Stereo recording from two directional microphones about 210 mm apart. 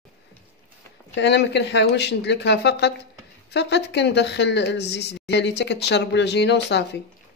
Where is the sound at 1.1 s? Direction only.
55° left (ahead or behind).